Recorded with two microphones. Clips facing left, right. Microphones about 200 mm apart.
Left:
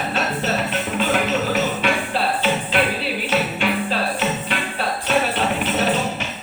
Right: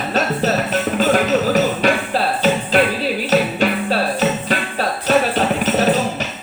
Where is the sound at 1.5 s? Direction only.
40° right (ahead or behind).